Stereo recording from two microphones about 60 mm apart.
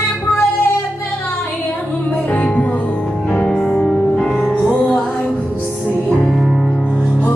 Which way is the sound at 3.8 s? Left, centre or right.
Centre.